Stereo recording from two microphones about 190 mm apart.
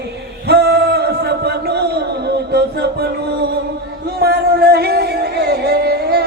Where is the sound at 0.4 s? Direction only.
60° right (ahead or behind).